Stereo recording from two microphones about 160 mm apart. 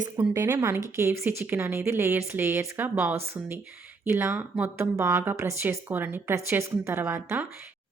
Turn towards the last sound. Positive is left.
turn(degrees=-15)  # may be behind; listen again after turning